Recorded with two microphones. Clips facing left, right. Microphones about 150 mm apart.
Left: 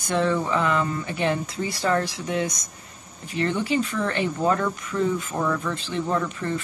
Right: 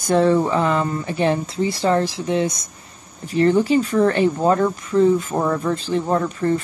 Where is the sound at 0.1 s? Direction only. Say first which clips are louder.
Right 7 dB; 35° right (ahead or behind).